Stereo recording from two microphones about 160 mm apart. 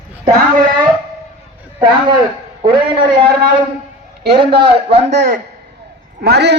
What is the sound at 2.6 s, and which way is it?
Speech, 30° right (ahead or behind).